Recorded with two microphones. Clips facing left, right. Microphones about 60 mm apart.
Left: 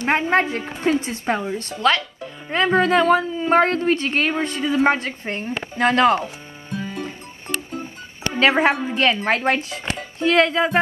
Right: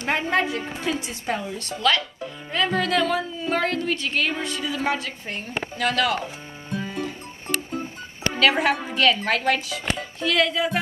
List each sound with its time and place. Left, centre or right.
0.0 s a woman's voice: left
8.4 s a woman's voice: left